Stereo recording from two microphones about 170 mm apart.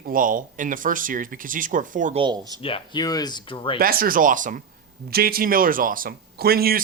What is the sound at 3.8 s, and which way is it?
Speech, 60° right (ahead or behind).